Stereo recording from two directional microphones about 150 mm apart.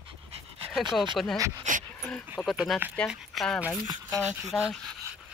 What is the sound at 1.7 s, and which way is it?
Speech, 55° right (ahead or behind).